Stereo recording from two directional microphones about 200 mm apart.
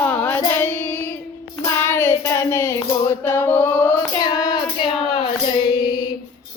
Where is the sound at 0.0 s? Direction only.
10° left (ahead or behind).